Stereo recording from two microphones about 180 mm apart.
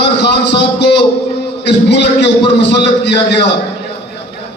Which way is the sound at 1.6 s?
70° left (ahead or behind).